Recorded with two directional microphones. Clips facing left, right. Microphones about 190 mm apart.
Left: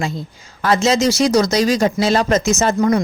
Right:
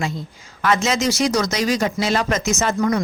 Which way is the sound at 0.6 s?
35° left (ahead or behind).